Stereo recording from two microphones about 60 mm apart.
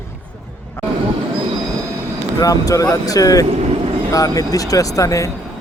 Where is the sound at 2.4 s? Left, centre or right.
Left.